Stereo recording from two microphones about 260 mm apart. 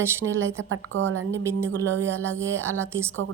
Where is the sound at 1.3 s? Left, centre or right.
Centre.